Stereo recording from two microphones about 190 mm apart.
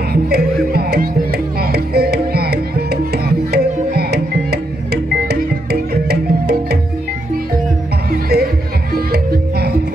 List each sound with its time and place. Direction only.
0.1 s music: 55° right (ahead or behind)
8.1 s music: 55° right (ahead or behind)